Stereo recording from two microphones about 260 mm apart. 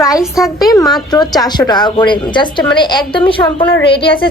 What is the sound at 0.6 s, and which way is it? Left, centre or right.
A woman's voice, centre.